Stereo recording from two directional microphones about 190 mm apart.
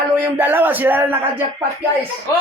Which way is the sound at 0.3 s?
10° right (ahead or behind).